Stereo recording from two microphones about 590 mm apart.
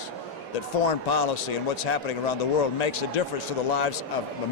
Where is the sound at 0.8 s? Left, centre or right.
Left.